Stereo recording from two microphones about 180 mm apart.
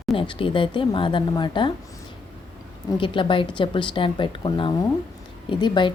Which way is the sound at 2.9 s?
30° left (ahead or behind).